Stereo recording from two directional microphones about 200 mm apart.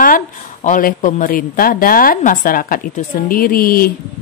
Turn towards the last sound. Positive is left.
turn(degrees=45)  # may be behind; listen again after turning